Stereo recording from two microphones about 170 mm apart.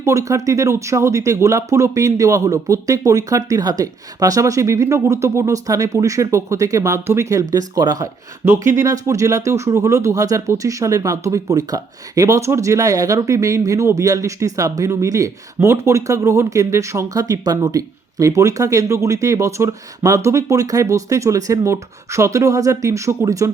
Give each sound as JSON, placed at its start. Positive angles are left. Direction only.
{"t": 0.0, "sound": "speech", "side_deg": -15}